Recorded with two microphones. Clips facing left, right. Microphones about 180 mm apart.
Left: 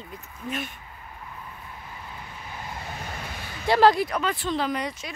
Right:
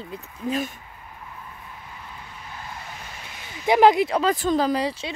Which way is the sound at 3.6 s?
20° right (ahead or behind).